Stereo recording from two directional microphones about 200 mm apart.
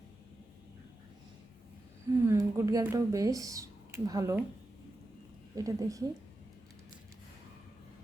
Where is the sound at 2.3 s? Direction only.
15° right (ahead or behind).